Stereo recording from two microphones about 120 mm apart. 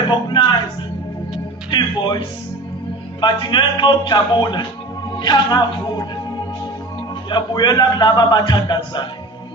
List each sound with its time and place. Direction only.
0.1 s a man's voice: 40° left (ahead or behind)
1.7 s a man's voice: 40° left (ahead or behind)
7.3 s a man's voice: 40° left (ahead or behind)